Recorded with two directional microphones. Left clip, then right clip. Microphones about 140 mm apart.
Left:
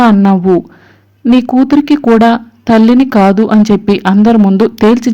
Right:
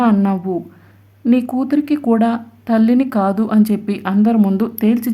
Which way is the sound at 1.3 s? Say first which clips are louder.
Left 9 dB; 30° left (ahead or behind).